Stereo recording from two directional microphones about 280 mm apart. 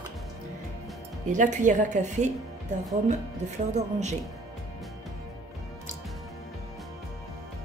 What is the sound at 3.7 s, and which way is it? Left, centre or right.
Speech, right.